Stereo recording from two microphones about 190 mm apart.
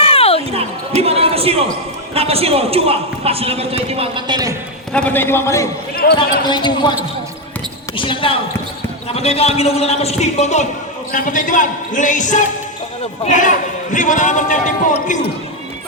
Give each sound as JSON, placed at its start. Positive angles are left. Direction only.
{"t": 0.0, "sound": "music", "side_deg": 30}
{"t": 0.5, "sound": "basketball bounce", "side_deg": -30}
{"t": 2.1, "sound": "a man's voice", "side_deg": -30}
{"t": 4.9, "sound": "a man's voice", "side_deg": 5}
{"t": 7.9, "sound": "a man's voice", "side_deg": 25}